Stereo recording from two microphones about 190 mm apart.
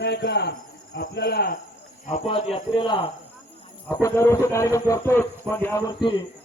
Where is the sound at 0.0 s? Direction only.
60° left (ahead or behind).